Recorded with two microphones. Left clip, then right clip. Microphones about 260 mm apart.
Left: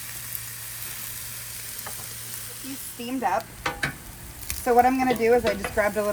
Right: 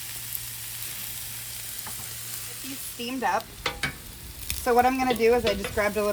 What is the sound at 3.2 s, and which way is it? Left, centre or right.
Stir, centre.